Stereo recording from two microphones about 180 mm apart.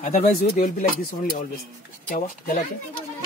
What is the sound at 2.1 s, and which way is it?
Speech, 45° left (ahead or behind).